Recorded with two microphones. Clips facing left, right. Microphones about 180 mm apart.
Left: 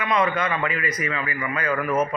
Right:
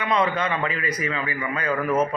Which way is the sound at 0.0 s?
30° right (ahead or behind).